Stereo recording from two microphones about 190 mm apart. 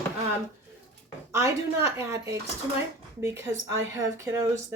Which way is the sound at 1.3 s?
15° right (ahead or behind).